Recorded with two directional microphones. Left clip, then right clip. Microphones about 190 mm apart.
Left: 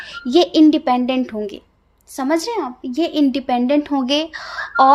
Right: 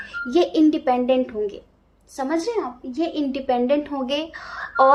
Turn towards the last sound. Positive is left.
turn(degrees=45)  # may be behind; listen again after turning